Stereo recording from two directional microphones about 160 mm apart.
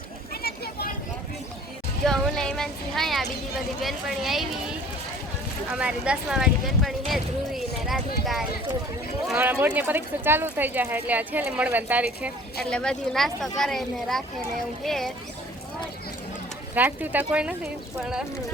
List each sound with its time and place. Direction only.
0.4 s vehicle: 75° left (ahead or behind)
2.0 s a sound: 5° left (ahead or behind)
3.8 s speech: centre (ahead or behind)
5.7 s speech: 5° right (ahead or behind)
12.7 s speech: 5° left (ahead or behind)
16.7 s speech: 10° right (ahead or behind)